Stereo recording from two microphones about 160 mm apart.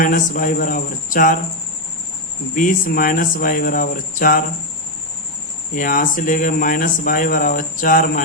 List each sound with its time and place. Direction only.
0.0 s speech: 60° left (ahead or behind)
2.6 s speech: 60° left (ahead or behind)
5.7 s speech: 60° left (ahead or behind)